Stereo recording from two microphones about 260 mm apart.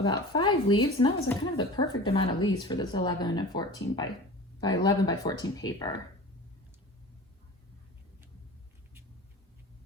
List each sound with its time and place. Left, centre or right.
0.0 s speech: centre